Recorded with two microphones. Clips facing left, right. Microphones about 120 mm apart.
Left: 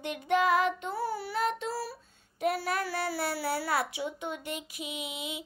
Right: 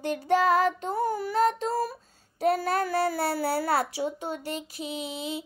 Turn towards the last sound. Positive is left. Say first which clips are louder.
# right 5 dB
turn(degrees=-35)  # may be behind; listen again after turning